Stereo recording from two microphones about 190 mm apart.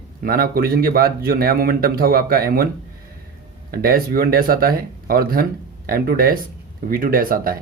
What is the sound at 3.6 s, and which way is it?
Speech, 50° right (ahead or behind).